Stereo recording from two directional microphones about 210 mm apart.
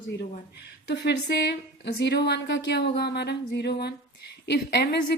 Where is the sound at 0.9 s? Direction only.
55° left (ahead or behind).